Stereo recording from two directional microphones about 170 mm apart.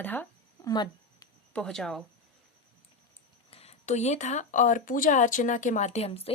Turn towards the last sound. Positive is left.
turn(degrees=35)  # may be behind; listen again after turning